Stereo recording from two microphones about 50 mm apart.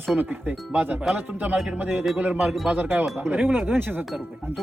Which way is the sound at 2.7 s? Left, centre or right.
Right.